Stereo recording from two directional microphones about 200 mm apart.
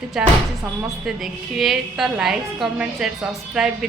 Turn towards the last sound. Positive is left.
turn(degrees=0)  # may be behind; listen again after turning